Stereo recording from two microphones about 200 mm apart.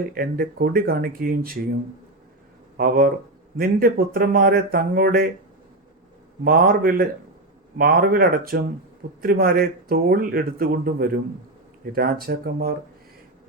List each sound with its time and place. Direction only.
0.1 s speech: 50° right (ahead or behind)
2.7 s speech: 45° right (ahead or behind)
6.4 s speech: 45° right (ahead or behind)